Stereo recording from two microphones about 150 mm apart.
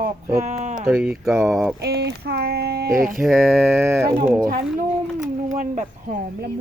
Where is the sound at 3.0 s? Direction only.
65° right (ahead or behind).